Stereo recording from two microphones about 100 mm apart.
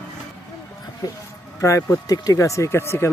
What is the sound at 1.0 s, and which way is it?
Speech, 40° left (ahead or behind).